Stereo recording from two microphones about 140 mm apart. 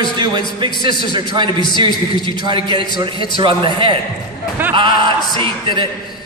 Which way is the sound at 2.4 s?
35° right (ahead or behind).